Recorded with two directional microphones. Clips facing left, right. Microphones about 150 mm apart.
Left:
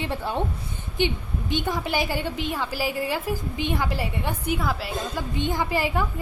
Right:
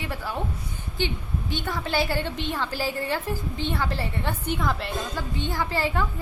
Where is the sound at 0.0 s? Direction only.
25° left (ahead or behind); by 5.2 s 5° left (ahead or behind).